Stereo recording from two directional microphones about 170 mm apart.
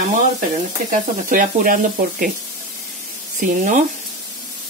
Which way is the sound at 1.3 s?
50° right (ahead or behind).